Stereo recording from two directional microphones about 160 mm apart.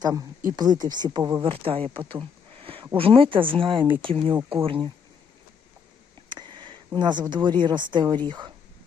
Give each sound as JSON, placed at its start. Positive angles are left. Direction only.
{"t": 0.0, "sound": "speech", "side_deg": -25}
{"t": 1.5, "sound": "speech", "side_deg": -35}
{"t": 6.2, "sound": "speech", "side_deg": -30}